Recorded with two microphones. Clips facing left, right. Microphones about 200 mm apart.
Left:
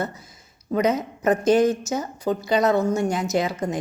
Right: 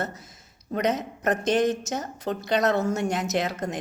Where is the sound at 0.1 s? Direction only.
Centre (ahead or behind).